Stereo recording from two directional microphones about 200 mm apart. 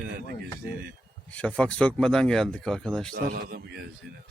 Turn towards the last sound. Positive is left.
turn(degrees=-55)  # may be behind; listen again after turning